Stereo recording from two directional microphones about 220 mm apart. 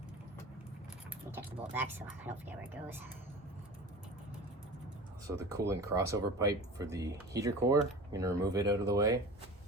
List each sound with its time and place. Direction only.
1.4 s speech: 10° right (ahead or behind)
5.6 s speech: 15° right (ahead or behind)